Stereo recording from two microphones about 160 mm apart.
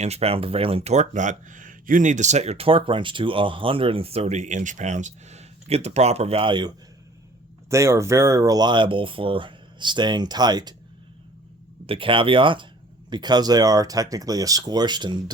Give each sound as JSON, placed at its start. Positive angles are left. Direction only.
{"t": 0.0, "sound": "speech", "side_deg": -40}
{"t": 7.7, "sound": "speech", "side_deg": -20}
{"t": 11.9, "sound": "speech", "side_deg": -35}